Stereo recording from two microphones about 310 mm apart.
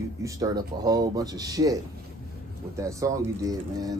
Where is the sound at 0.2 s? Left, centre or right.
Centre.